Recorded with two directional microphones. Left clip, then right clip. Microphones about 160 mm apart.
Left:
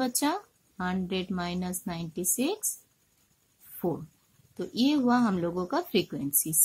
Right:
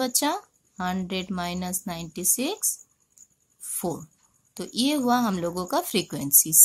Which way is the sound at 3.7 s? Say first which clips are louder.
Right 1 dB; 15° right (ahead or behind).